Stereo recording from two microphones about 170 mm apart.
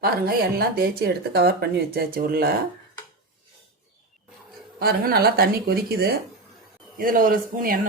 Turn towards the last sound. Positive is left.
turn(degrees=-55)  # may be behind; listen again after turning